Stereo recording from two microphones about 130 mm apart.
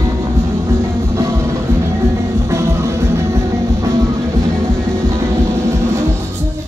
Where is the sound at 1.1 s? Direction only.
20° right (ahead or behind).